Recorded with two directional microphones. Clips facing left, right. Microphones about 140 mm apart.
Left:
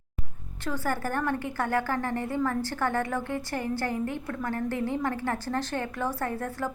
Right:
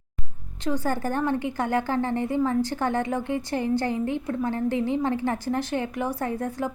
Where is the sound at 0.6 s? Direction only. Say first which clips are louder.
Right 4 dB; 20° right (ahead or behind).